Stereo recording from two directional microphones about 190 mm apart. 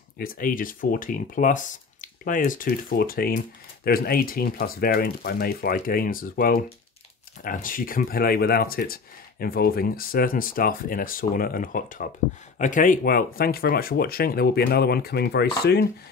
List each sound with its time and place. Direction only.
0.2 s speech: 50° left (ahead or behind)